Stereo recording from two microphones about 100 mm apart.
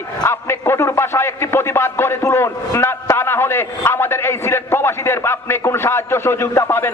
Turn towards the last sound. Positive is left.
turn(degrees=25)  # may be behind; listen again after turning